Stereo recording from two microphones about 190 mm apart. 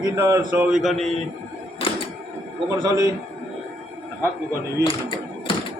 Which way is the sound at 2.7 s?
20° right (ahead or behind).